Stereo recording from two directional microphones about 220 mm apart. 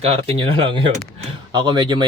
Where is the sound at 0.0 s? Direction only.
25° right (ahead or behind).